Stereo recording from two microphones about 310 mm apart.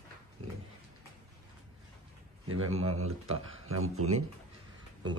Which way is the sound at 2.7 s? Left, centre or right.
Right.